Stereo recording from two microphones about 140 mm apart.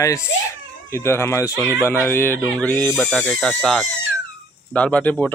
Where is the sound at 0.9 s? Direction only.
20° left (ahead or behind).